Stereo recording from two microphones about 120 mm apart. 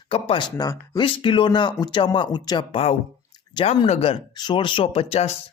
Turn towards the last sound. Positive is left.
turn(degrees=55)  # may be behind; listen again after turning